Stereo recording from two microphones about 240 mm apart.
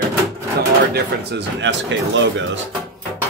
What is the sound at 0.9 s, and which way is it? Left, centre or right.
Speech, right.